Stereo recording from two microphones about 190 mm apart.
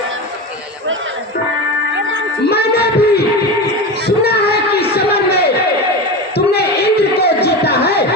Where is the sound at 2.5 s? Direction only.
55° left (ahead or behind).